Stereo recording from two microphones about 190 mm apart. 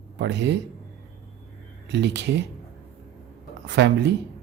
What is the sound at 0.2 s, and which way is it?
Speech, 65° right (ahead or behind).